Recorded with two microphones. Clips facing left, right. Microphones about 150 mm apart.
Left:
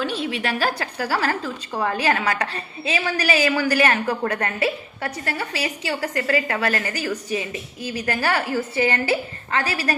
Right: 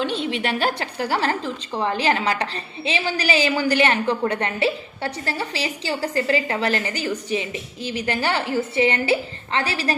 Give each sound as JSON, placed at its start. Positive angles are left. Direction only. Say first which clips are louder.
{"t": 0.0, "sound": "a woman's voice", "louder": "right 1 dB", "side_deg": -30}